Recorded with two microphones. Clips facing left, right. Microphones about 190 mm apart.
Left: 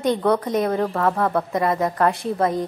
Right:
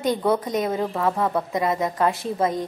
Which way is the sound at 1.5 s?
20° right (ahead or behind).